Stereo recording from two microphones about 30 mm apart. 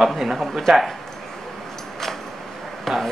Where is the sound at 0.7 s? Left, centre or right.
Centre.